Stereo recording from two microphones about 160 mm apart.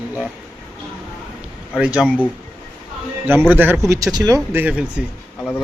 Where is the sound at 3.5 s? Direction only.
10° right (ahead or behind).